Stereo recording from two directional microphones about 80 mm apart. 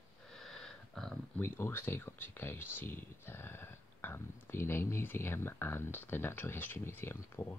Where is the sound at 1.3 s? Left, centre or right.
Left.